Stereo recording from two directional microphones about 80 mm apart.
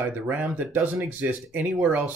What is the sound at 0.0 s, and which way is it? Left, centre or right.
Speech, right.